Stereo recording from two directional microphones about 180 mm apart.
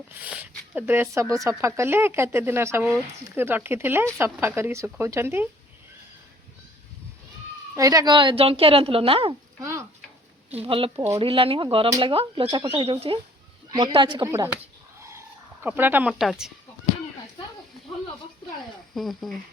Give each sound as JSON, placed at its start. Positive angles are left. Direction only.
{"t": 0.2, "sound": "speech", "side_deg": -10}
{"t": 7.8, "sound": "speech", "side_deg": -20}
{"t": 9.6, "sound": "stir", "side_deg": -15}
{"t": 10.7, "sound": "speech", "side_deg": -30}
{"t": 14.3, "sound": "speech", "side_deg": -15}
{"t": 15.6, "sound": "speech", "side_deg": -10}
{"t": 18.9, "sound": "speech", "side_deg": 0}